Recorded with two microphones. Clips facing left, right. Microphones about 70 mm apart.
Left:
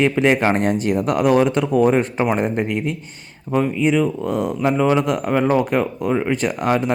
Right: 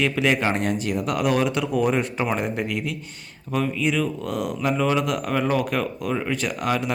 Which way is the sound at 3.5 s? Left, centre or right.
Left.